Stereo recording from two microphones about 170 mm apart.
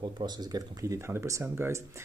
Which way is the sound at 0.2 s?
25° right (ahead or behind).